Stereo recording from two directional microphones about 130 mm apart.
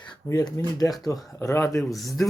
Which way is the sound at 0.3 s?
30° left (ahead or behind).